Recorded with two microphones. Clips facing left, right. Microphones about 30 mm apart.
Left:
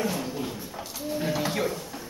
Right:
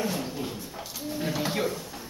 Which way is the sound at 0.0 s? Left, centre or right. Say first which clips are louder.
Left 1 dB; centre.